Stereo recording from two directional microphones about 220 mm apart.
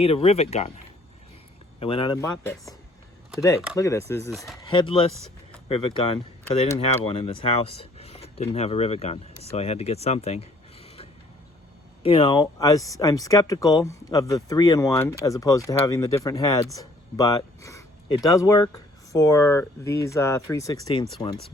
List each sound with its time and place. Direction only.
0.0 s speech: 25° left (ahead or behind)
1.8 s speech: 25° left (ahead or behind)
3.8 s speech: 15° left (ahead or behind)
4.3 s speech: centre (ahead or behind)
4.5 s speech: 20° left (ahead or behind)